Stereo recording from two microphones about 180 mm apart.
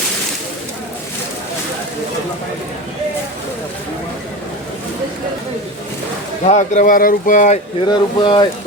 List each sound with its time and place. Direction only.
6.4 s speech: 40° left (ahead or behind)
7.9 s speech: 25° left (ahead or behind)